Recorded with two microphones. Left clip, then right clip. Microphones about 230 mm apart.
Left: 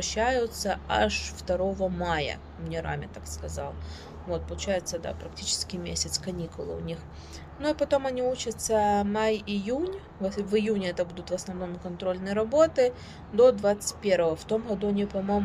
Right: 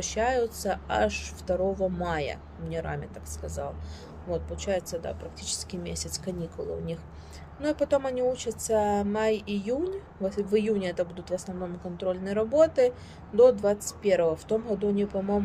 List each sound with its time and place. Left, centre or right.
0.0 s a woman's voice: centre